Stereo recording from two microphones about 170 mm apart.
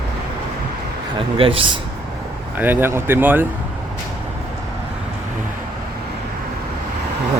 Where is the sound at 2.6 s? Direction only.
10° right (ahead or behind).